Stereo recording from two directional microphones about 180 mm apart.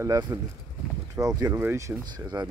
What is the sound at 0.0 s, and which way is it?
Speech, 20° right (ahead or behind).